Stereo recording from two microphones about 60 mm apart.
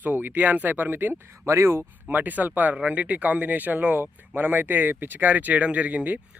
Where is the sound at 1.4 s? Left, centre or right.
Right.